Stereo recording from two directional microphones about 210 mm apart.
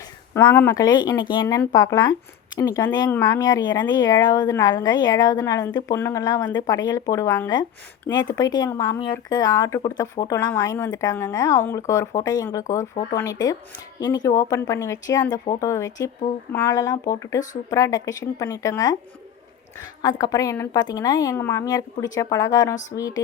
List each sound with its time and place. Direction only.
0.3 s speech: 10° left (ahead or behind)
20.0 s speech: 15° left (ahead or behind)